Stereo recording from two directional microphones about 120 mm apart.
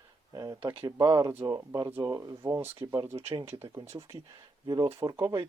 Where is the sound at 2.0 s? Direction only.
30° right (ahead or behind).